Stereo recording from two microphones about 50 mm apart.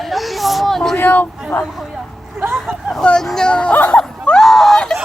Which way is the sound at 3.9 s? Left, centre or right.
Centre.